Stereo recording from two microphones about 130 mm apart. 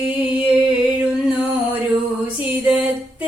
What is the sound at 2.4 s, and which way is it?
Music, 10° right (ahead or behind).